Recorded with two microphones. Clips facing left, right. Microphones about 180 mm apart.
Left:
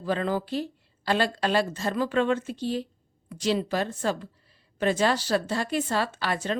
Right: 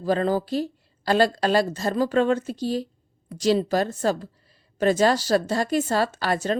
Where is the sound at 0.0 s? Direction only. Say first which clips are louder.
Right 5 dB; 40° right (ahead or behind).